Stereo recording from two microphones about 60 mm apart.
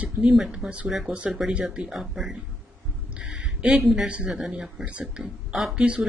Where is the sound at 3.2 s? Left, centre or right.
Centre.